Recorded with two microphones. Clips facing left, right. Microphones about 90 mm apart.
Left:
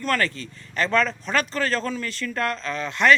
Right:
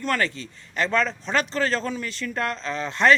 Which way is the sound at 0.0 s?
20° right (ahead or behind).